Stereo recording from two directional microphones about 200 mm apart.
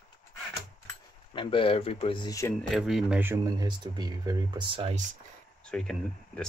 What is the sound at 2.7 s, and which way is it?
Speech, centre (ahead or behind).